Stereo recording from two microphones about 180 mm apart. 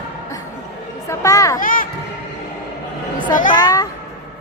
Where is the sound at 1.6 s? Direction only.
50° left (ahead or behind).